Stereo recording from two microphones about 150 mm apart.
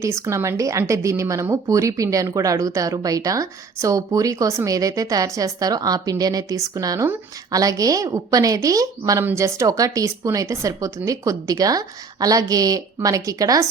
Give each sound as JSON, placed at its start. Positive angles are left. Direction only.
{"t": 0.0, "sound": "a woman's voice", "side_deg": -20}